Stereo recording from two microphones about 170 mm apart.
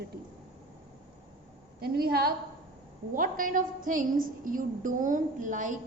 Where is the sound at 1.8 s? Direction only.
65° right (ahead or behind).